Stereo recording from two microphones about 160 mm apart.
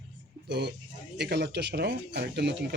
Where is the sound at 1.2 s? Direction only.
90° right.